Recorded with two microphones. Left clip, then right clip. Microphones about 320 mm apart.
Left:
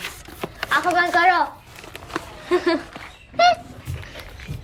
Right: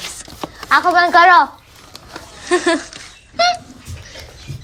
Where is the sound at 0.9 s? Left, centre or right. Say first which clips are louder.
Right 8 dB; centre.